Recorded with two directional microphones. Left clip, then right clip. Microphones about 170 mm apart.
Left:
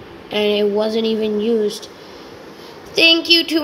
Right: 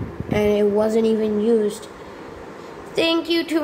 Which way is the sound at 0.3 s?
5° left (ahead or behind).